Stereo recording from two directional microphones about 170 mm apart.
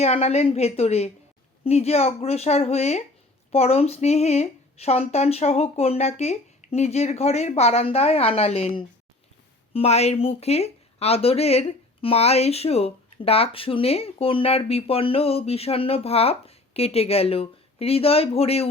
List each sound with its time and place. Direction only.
0.0 s speech: 40° left (ahead or behind)